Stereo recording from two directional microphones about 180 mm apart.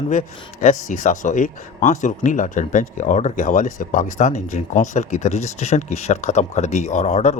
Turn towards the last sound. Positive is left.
turn(degrees=40)  # may be behind; listen again after turning